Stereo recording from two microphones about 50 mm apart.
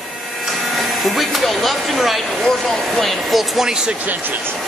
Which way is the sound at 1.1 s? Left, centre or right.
Centre.